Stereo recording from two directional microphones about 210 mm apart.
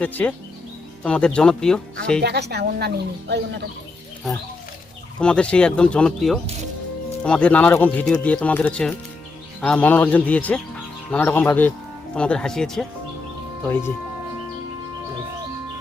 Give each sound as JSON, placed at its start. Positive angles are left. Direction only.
{"t": 0.0, "sound": "speech", "side_deg": 5}
{"t": 2.2, "sound": "speech", "side_deg": -50}
{"t": 5.2, "sound": "speech", "side_deg": 5}